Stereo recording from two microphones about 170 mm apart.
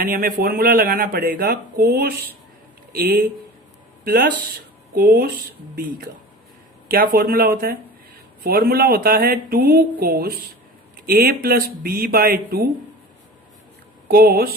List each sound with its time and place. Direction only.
0.0 s speech: 60° right (ahead or behind)
6.9 s speech: 60° right (ahead or behind)
14.1 s speech: 65° right (ahead or behind)